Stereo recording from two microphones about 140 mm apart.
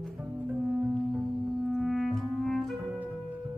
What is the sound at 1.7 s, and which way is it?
Clarinet, centre (ahead or behind).